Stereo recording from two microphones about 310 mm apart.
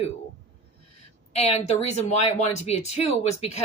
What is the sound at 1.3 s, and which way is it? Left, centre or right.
A woman's voice, centre.